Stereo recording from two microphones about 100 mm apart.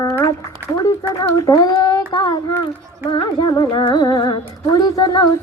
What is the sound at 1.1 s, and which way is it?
Speech, 35° left (ahead or behind).